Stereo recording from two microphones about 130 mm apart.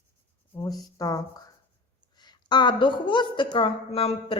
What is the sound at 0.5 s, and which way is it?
A woman's voice, 25° left (ahead or behind).